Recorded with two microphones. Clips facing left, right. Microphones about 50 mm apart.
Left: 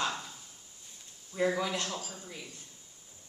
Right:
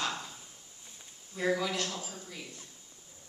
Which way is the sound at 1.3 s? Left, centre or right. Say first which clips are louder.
Left 1 dB; left.